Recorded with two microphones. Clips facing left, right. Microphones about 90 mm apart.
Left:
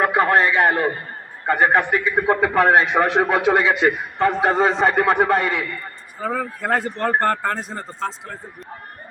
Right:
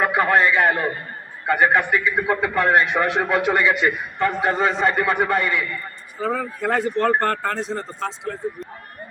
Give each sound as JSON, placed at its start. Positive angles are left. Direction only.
{"t": 0.0, "sound": "a man's voice", "side_deg": 35}
{"t": 6.1, "sound": "speech", "side_deg": 0}